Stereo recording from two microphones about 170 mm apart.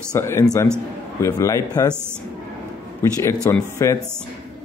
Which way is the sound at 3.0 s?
15° left (ahead or behind).